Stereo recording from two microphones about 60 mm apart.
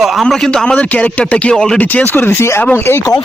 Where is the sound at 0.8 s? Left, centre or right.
Left.